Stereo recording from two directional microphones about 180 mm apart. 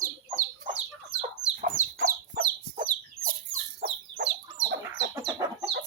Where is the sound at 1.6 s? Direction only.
50° right (ahead or behind).